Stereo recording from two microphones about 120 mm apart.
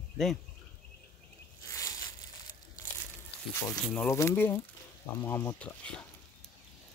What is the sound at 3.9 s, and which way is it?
Speech, 20° left (ahead or behind).